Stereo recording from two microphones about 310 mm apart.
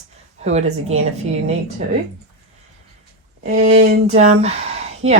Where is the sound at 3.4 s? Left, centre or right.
Right.